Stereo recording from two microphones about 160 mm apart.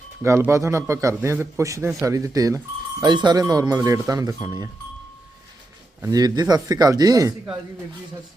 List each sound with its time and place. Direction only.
0.2 s a man's voice: 15° right (ahead or behind)
6.0 s speech: 20° right (ahead or behind)